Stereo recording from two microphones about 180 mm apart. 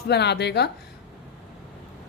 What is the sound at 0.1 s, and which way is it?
Speech, 70° left (ahead or behind).